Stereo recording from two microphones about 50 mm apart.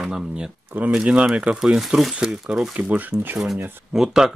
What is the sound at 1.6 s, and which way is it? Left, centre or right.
Speech, centre.